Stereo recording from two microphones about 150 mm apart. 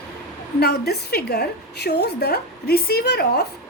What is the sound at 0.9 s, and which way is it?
A woman's voice, 90° left.